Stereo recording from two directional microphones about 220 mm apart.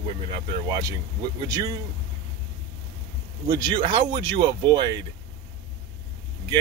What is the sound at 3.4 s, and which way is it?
Speech, 20° right (ahead or behind).